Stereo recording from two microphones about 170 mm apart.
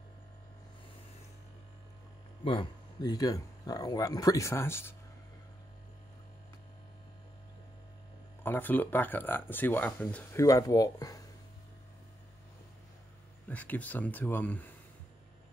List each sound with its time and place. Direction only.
2.4 s speech: 30° left (ahead or behind)
8.5 s speech: 10° left (ahead or behind)
10.4 s speech: 20° left (ahead or behind)
13.5 s speech: 10° left (ahead or behind)